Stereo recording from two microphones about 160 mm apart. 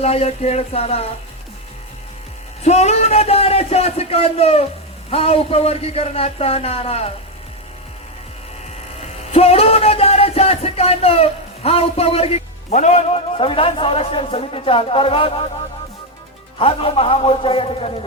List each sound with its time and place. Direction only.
0.0 s speech: 40° left (ahead or behind)
2.6 s speech: 45° left (ahead or behind)
9.0 s speech: 40° left (ahead or behind)
16.6 s speech: 35° left (ahead or behind)